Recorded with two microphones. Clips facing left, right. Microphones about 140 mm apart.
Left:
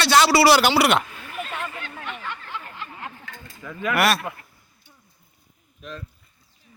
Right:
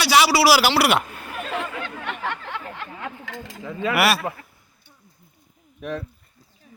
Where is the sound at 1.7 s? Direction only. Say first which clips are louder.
Right 4 dB; 85° right.